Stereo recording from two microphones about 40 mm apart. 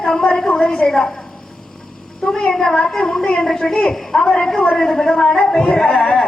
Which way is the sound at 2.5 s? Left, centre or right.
Centre.